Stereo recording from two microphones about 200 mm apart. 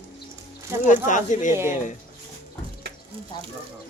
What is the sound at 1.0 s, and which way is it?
Speech, 40° left (ahead or behind).